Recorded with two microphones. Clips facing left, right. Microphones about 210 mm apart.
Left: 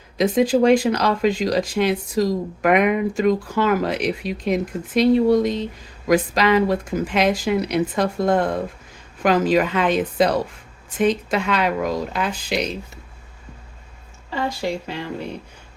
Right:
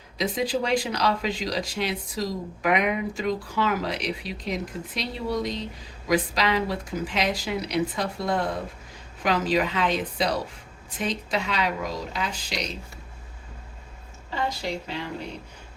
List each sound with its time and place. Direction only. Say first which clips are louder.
0.2 s speech: left 9 dB; 50° left (ahead or behind)